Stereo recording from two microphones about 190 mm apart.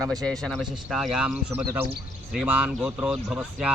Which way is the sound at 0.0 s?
5° left (ahead or behind).